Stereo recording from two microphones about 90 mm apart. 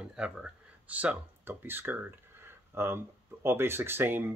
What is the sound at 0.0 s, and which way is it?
Speech, 10° right (ahead or behind).